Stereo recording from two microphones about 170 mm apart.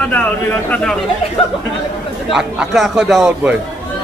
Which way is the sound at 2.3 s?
Centre (ahead or behind).